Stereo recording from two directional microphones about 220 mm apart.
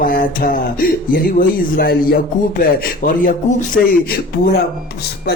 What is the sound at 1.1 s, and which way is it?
Speech, 40° left (ahead or behind).